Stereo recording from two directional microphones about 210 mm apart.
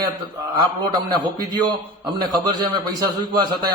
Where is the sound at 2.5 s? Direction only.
20° right (ahead or behind).